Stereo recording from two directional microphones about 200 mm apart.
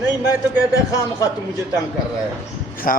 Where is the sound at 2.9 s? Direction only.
45° left (ahead or behind).